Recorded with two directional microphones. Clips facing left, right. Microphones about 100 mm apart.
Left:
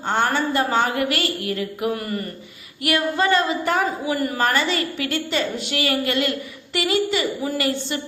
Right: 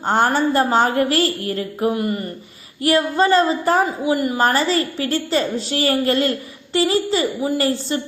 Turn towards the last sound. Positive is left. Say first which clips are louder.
# right 4 dB
turn(degrees=-35)  # may be behind; listen again after turning